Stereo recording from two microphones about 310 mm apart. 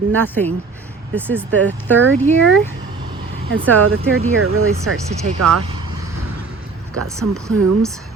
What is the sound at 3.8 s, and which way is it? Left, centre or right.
Speech, right.